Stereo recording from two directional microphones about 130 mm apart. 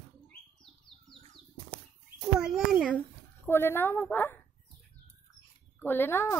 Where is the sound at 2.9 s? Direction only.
15° left (ahead or behind).